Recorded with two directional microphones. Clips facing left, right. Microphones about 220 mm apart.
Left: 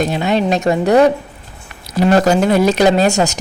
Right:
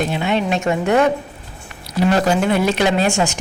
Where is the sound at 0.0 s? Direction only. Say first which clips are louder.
Left 4 dB; 40° left (ahead or behind).